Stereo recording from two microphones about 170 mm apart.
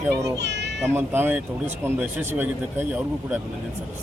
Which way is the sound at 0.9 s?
15° right (ahead or behind).